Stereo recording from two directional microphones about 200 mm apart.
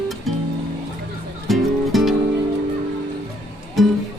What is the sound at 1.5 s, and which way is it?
Music, centre (ahead or behind).